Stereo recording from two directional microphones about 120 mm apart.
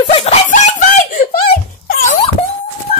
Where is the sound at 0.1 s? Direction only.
55° left (ahead or behind).